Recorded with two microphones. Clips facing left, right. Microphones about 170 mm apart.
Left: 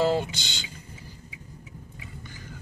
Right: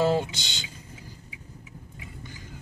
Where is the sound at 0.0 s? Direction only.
20° right (ahead or behind).